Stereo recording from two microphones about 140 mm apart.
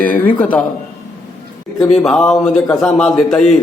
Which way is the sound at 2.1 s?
5° left (ahead or behind).